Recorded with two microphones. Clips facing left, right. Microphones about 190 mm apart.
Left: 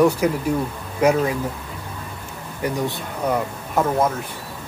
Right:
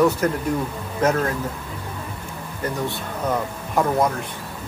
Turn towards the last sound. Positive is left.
turn(degrees=5)  # may be behind; listen again after turning